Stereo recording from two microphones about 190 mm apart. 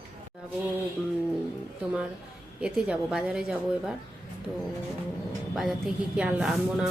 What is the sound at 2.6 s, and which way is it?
Speech, 5° right (ahead or behind).